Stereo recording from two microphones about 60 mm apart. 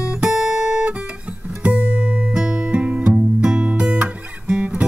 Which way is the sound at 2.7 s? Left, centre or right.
Right.